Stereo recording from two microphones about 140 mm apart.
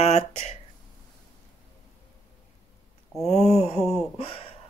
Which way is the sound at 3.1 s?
Centre (ahead or behind).